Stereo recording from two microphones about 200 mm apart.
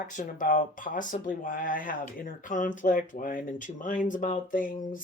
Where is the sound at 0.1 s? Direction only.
40° left (ahead or behind).